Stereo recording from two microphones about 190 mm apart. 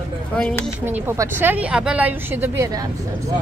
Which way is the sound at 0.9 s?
10° right (ahead or behind).